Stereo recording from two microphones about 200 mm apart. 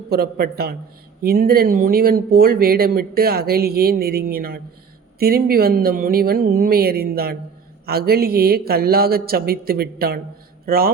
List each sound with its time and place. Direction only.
0.1 s speech: 50° right (ahead or behind)